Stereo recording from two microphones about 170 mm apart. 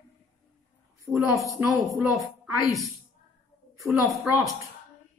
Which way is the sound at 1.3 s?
20° right (ahead or behind).